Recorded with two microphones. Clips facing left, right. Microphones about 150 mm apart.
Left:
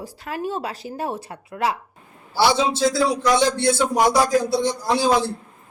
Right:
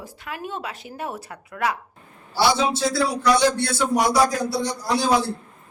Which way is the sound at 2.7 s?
20° left (ahead or behind).